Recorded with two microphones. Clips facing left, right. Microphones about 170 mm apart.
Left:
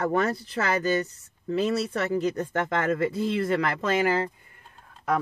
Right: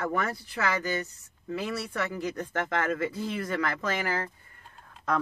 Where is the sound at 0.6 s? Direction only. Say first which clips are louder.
Left 1 dB; 45° left (ahead or behind).